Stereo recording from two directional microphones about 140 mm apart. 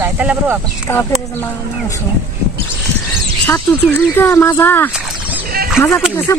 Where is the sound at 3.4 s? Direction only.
10° left (ahead or behind).